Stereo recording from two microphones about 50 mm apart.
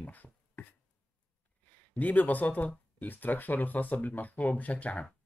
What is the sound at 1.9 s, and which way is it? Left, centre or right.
Speech, left.